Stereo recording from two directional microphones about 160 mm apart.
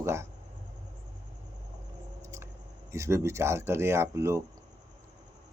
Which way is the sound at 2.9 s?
15° right (ahead or behind).